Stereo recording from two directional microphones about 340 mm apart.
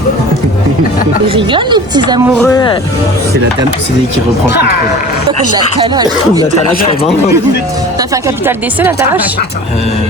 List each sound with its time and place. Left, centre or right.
1.3 s a woman's voice: centre
2.3 s speech: centre
4.5 s speech: left
5.5 s a woman's voice: centre
8.1 s a woman's voice: centre